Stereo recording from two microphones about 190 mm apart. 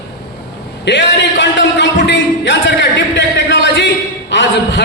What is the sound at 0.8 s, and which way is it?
A man's voice, 65° left (ahead or behind).